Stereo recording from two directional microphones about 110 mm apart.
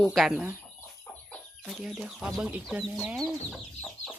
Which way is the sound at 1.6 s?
5° right (ahead or behind).